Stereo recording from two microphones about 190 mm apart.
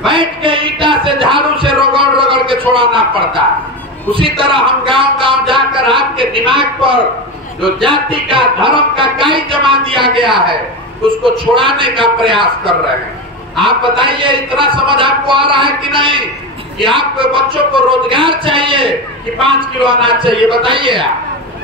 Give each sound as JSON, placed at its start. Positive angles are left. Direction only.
{"t": 0.0, "sound": "a sound", "side_deg": -25}
{"t": 2.7, "sound": "speech", "side_deg": -25}
{"t": 20.0, "sound": "speech", "side_deg": -25}